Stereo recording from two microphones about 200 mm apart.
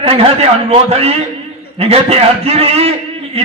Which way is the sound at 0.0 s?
30° right (ahead or behind).